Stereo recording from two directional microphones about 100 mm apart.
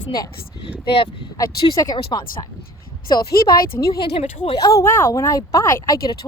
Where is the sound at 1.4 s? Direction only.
35° left (ahead or behind).